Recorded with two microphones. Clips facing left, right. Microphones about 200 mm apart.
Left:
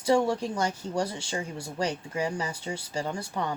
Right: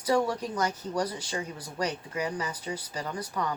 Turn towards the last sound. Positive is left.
turn(degrees=30)  # may be behind; listen again after turning